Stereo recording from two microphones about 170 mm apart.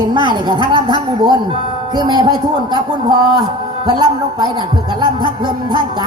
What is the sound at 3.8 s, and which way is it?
Speech, 25° right (ahead or behind).